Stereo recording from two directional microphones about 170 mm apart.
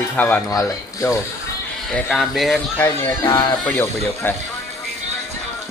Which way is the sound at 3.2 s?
25° left (ahead or behind).